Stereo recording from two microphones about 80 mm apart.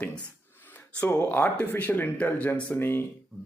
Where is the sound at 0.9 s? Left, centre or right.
Centre.